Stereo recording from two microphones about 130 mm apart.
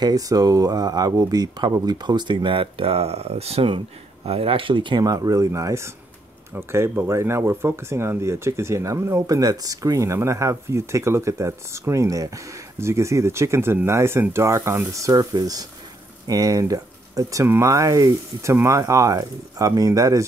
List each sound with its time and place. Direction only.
0.0 s speech: 30° right (ahead or behind)